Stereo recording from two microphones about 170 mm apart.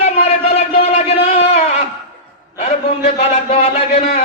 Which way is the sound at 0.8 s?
40° left (ahead or behind).